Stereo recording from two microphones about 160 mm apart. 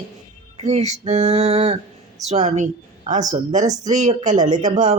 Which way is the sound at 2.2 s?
45° right (ahead or behind).